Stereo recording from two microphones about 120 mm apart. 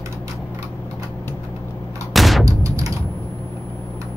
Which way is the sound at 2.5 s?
30° right (ahead or behind).